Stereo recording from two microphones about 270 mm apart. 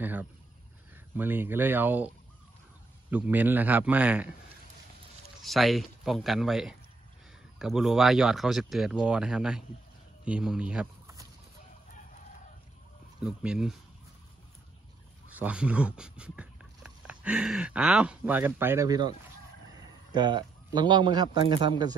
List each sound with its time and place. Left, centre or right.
0.0 s speech: centre
5.4 s speech: centre
13.2 s speech: centre
15.2 s a man's voice: centre